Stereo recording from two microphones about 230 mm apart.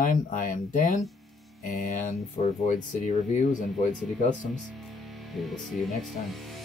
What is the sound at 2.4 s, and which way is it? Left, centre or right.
Speech, left.